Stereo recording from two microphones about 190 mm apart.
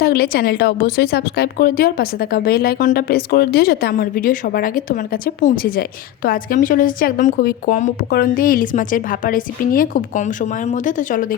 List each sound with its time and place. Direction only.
0.0 s a woman's voice: 55° left (ahead or behind)